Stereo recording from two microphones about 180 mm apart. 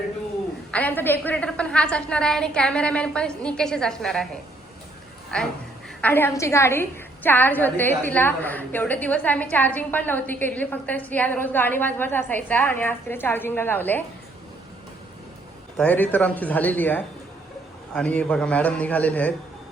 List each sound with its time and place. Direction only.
0.7 s a woman's voice: 10° left (ahead or behind)
5.3 s a woman's voice: 5° left (ahead or behind)
15.8 s a woman's voice: 10° left (ahead or behind)